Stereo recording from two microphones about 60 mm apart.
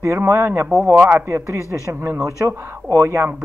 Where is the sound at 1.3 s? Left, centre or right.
Right.